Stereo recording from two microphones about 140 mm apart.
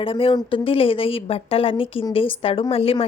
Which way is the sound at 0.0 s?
40° left (ahead or behind).